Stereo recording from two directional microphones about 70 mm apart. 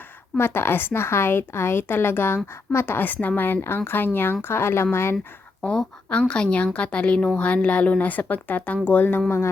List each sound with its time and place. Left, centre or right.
0.3 s a woman's voice: left
5.6 s a woman's voice: centre